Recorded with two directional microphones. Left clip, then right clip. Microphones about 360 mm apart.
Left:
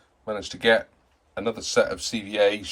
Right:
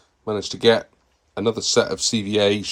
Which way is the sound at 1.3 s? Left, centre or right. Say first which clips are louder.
Right 4 dB; centre.